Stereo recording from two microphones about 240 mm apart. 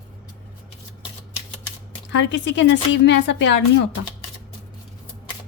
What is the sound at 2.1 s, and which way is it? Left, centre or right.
Speech, left.